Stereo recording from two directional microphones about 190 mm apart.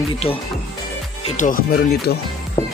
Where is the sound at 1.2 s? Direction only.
40° left (ahead or behind).